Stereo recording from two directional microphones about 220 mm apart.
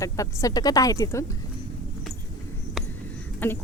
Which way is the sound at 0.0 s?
15° left (ahead or behind).